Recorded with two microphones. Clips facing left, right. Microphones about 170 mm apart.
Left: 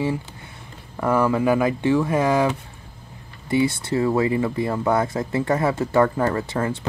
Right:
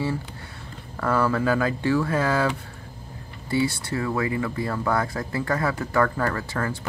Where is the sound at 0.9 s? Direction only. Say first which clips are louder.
Left 3 dB; 15° left (ahead or behind).